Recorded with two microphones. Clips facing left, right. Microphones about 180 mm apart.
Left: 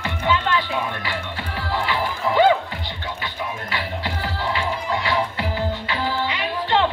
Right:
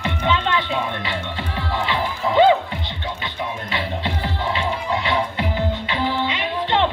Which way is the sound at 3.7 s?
20° right (ahead or behind).